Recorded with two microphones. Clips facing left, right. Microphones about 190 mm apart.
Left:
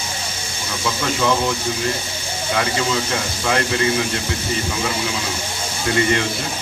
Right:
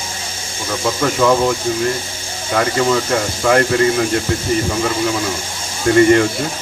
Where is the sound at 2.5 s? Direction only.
50° right (ahead or behind).